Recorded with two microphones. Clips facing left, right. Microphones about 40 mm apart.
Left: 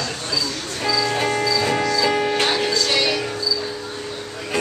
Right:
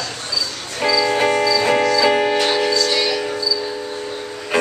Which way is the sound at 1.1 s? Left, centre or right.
Centre.